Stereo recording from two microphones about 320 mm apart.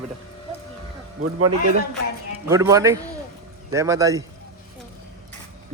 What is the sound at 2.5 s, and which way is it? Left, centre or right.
A man's voice, centre.